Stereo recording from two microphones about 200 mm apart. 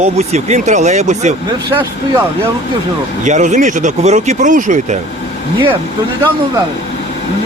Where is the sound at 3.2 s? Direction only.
40° right (ahead or behind).